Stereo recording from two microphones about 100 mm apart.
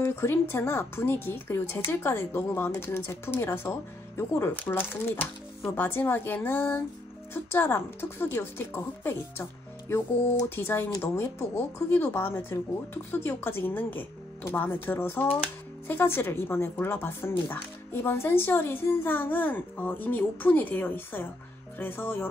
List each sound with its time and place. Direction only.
0.0 s speech: 25° left (ahead or behind)